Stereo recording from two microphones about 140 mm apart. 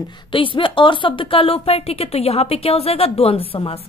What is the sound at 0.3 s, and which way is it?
Speech, 35° left (ahead or behind).